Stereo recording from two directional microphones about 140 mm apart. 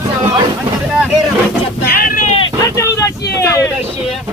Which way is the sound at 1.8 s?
90° left.